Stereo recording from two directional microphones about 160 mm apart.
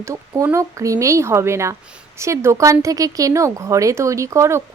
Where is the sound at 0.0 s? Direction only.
20° right (ahead or behind).